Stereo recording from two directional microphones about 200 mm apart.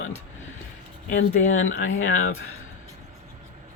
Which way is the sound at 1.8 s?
85° left.